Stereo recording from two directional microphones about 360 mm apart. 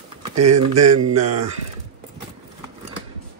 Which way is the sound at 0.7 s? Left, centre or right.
Right.